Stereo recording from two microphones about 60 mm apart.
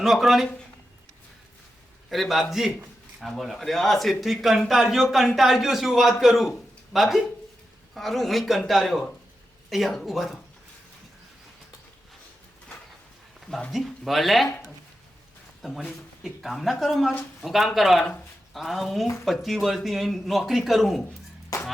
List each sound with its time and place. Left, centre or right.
0.0 s a man's voice: centre
2.0 s a man's voice: centre
13.7 s a man's voice: centre
15.6 s a man's voice: centre
21.5 s a sound: left